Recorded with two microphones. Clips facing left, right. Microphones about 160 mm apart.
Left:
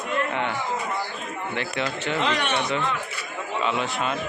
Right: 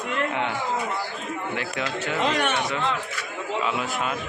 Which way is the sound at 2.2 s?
45° right (ahead or behind).